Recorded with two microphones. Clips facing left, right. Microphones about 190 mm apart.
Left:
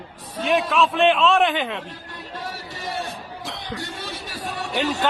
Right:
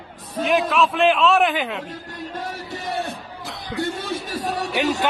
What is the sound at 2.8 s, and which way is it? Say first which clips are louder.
Music: right 2 dB; 60° right (ahead or behind).